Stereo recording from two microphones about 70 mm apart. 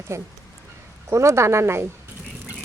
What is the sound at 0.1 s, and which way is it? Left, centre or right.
Speech, right.